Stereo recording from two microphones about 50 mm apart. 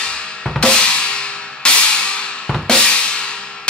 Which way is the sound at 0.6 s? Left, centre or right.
Centre.